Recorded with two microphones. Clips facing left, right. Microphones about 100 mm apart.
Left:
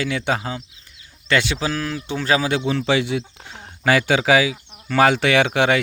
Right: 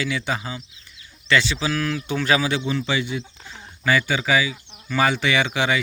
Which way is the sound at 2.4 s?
60° left (ahead or behind).